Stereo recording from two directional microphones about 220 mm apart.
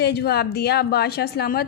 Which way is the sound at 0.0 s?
45° left (ahead or behind).